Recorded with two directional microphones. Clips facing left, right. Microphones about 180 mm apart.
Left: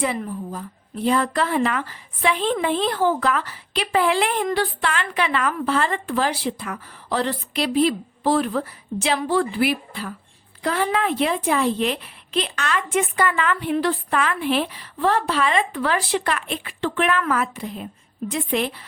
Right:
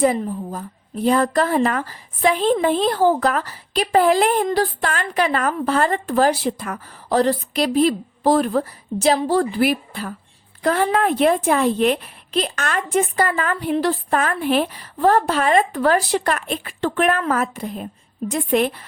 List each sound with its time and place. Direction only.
0.0 s a woman's voice: 40° right (ahead or behind)